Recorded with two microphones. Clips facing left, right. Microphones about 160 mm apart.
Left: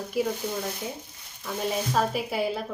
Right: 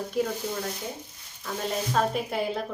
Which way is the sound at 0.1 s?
5° left (ahead or behind).